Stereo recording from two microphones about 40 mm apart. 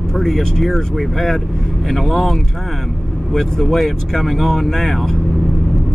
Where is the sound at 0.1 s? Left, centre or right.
Centre.